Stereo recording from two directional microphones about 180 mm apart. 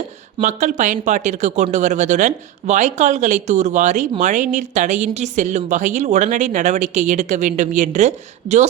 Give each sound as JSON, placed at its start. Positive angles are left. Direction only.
{"t": 0.4, "sound": "a woman's voice", "side_deg": -45}